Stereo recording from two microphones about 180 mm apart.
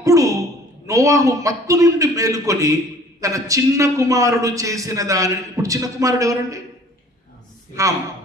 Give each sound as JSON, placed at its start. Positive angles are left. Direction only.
{"t": 0.0, "sound": "a man's voice", "side_deg": -20}